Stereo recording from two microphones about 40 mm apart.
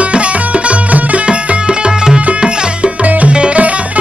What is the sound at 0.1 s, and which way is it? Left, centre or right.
Music, right.